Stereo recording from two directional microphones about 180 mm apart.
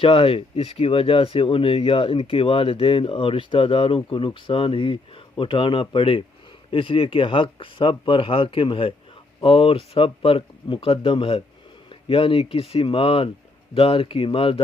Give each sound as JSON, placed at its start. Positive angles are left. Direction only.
{"t": 0.0, "sound": "speech", "side_deg": 30}